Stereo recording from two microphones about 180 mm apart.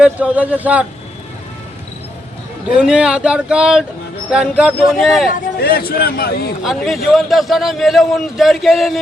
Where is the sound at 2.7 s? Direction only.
5° right (ahead or behind).